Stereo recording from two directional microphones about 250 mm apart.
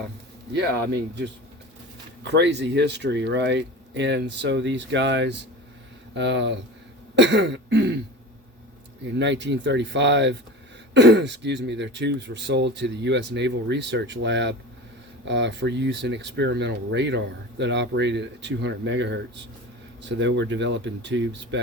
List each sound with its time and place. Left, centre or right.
2.2 s speech: right
7.2 s throat clearing: right
9.1 s speech: right